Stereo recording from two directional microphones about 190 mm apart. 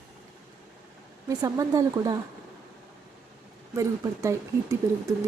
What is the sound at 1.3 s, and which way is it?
Speech, 20° right (ahead or behind).